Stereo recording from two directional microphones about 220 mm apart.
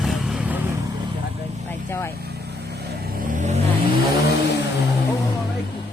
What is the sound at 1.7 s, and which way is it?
Vehicle, 10° left (ahead or behind).